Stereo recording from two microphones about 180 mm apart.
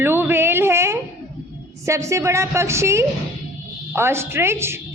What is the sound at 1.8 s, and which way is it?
A woman's voice, 15° right (ahead or behind).